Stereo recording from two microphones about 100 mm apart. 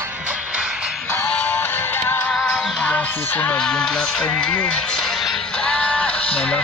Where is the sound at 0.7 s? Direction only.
5° right (ahead or behind).